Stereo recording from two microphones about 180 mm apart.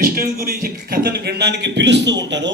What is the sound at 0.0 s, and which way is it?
A man's voice, 55° right (ahead or behind).